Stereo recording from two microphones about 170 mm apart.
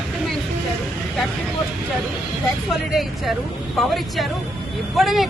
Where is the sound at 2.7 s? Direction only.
Centre (ahead or behind).